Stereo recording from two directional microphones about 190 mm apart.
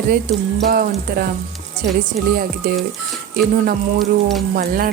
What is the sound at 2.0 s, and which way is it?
Speech, 50° right (ahead or behind).